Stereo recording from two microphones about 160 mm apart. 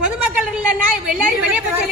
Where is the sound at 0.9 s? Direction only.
10° right (ahead or behind).